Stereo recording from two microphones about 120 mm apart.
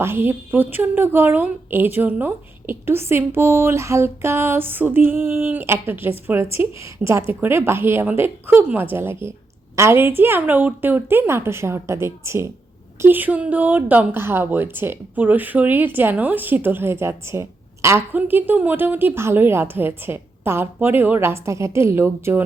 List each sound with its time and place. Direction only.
0.0 s a woman's voice: 20° right (ahead or behind)